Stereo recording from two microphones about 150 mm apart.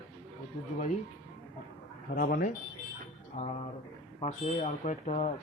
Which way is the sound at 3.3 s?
45° left (ahead or behind).